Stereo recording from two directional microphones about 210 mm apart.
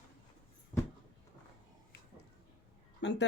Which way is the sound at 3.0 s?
55° left (ahead or behind).